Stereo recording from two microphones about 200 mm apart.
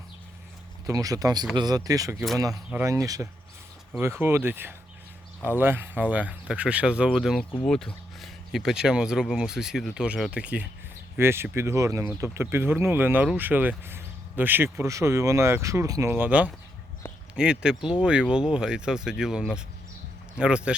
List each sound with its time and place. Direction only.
0.9 s speech: 15° right (ahead or behind)
2.1 s speech: centre (ahead or behind)